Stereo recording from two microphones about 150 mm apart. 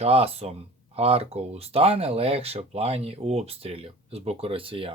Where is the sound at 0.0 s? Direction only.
40° right (ahead or behind).